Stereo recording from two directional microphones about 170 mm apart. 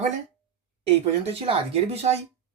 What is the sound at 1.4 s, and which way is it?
Speech, 35° right (ahead or behind).